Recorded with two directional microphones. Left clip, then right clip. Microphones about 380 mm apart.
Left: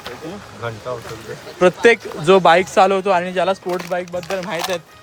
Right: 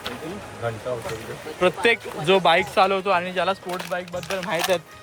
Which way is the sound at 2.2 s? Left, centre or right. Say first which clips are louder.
Left 6 dB; centre.